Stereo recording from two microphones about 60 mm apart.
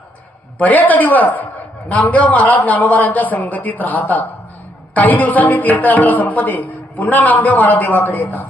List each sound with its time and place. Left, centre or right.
0.6 s a man's voice: left